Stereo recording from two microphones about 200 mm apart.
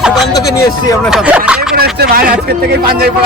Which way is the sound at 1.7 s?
50° right (ahead or behind).